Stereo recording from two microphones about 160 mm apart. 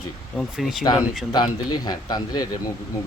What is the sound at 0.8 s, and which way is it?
A man's voice, 25° left (ahead or behind).